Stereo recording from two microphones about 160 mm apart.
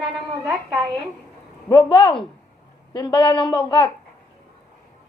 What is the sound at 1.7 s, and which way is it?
A woman's voice, 30° left (ahead or behind).